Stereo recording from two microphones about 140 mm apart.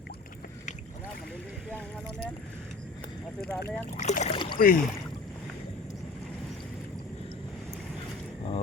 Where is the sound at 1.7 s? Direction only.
10° left (ahead or behind).